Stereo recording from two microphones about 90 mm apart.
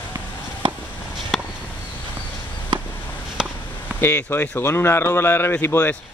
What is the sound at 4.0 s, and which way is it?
Speech, 25° left (ahead or behind).